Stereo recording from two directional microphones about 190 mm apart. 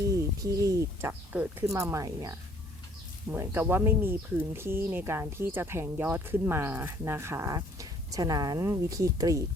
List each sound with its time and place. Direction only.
0.1 s speech: 15° right (ahead or behind)